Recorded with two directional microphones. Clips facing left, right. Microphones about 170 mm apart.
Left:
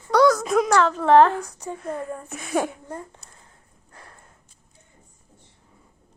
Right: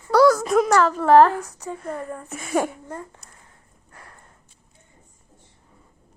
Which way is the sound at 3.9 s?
25° left (ahead or behind).